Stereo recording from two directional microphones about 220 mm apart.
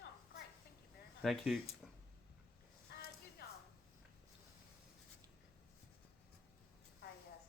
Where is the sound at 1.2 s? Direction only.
Centre (ahead or behind).